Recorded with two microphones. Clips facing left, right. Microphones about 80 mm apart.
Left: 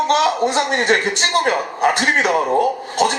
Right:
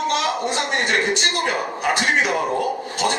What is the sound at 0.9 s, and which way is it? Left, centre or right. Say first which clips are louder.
A man's voice: left 5 dB; left.